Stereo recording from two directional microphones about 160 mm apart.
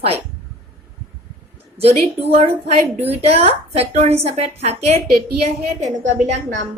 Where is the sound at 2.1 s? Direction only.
40° right (ahead or behind).